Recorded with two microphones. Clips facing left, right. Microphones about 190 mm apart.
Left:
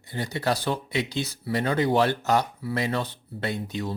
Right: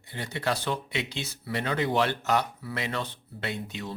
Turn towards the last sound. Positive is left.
turn(degrees=40)  # may be behind; listen again after turning